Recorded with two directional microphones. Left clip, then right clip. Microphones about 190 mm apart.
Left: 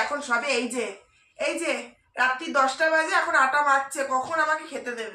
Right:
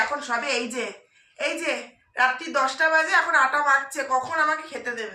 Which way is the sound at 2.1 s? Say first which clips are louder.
Right 1 dB; 15° right (ahead or behind).